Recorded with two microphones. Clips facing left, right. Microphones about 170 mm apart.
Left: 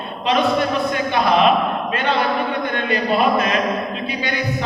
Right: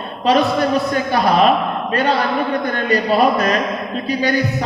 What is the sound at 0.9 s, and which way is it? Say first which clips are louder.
Speech: right 2 dB; 40° right (ahead or behind).